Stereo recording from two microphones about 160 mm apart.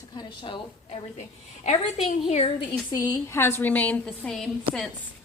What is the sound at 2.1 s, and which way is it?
Speech, 40° left (ahead or behind).